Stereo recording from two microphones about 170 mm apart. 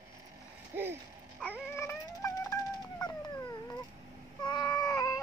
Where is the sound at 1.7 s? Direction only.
15° left (ahead or behind).